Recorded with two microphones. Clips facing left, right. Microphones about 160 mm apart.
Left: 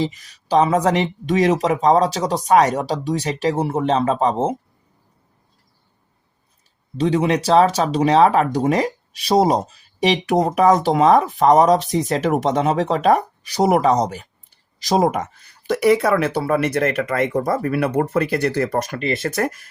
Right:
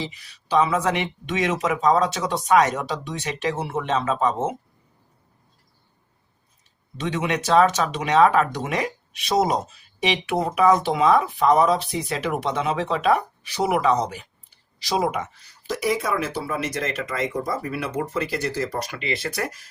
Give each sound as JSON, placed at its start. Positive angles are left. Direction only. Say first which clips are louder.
{"t": 0.0, "sound": "speech", "louder": "left 9 dB", "side_deg": 45}
{"t": 6.9, "sound": "speech", "louder": "left 7 dB", "side_deg": 30}